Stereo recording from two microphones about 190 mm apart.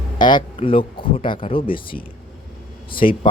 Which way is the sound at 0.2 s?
25° left (ahead or behind).